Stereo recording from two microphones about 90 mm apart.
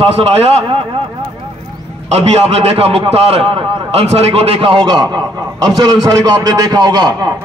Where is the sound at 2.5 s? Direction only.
90° right; by 4.8 s 70° right (ahead or behind).